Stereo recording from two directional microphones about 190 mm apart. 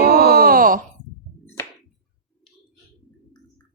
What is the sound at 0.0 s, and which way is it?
Groan, 55° right (ahead or behind).